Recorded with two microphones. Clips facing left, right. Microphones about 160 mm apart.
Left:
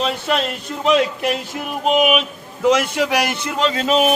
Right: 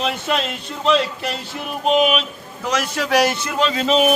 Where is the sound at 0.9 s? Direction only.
10° left (ahead or behind).